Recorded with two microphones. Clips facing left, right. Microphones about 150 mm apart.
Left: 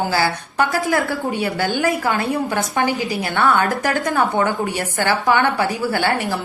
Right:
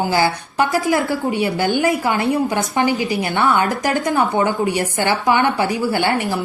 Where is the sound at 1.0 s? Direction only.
Centre (ahead or behind).